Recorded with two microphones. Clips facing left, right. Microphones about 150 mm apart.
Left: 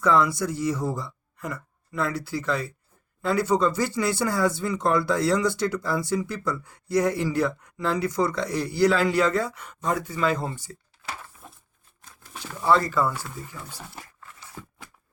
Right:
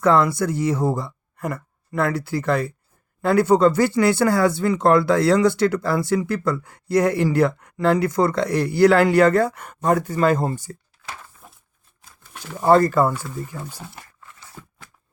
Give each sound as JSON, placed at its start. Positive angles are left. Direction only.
{"t": 0.0, "sound": "speech", "side_deg": -60}
{"t": 12.0, "sound": "a sound", "side_deg": 0}
{"t": 12.5, "sound": "speech", "side_deg": -50}
{"t": 13.7, "sound": "speech", "side_deg": -10}